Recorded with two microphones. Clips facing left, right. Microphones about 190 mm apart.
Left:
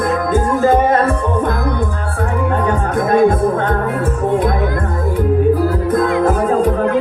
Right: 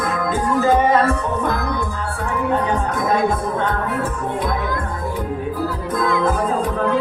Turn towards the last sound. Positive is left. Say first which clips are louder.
# left 5 dB
turn(degrees=50)  # may be behind; listen again after turning